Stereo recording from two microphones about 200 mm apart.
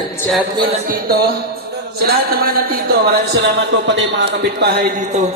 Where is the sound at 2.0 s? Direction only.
50° right (ahead or behind).